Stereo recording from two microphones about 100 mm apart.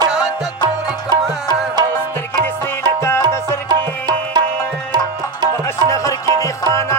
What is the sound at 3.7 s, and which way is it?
Music, 45° right (ahead or behind).